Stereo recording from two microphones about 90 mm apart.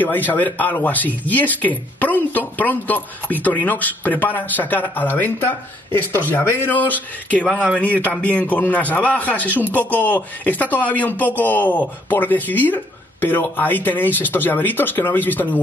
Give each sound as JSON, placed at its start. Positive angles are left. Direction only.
{"t": 0.0, "sound": "a man's voice", "side_deg": 20}